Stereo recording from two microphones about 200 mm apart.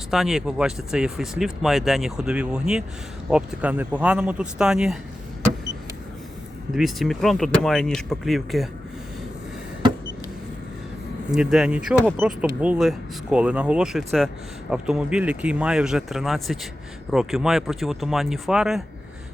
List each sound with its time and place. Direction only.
0.1 s speech: centre (ahead or behind)
6.7 s speech: centre (ahead or behind)
11.3 s speech: 5° right (ahead or behind)